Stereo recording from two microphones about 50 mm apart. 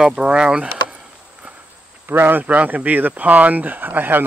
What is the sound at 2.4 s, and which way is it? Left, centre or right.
Speech, right.